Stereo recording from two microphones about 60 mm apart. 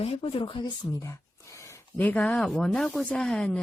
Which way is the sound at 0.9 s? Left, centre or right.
Left.